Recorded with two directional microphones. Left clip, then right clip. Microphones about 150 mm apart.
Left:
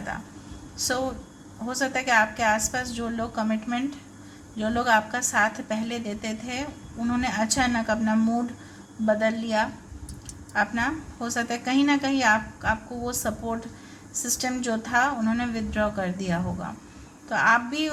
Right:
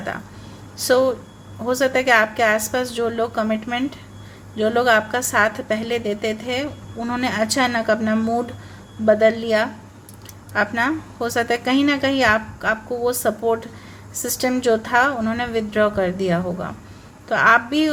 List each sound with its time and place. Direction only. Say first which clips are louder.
0.9 s a woman's voice: right 12 dB; 40° right (ahead or behind)